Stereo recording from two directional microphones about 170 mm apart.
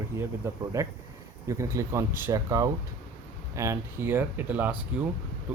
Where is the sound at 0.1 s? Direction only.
15° right (ahead or behind).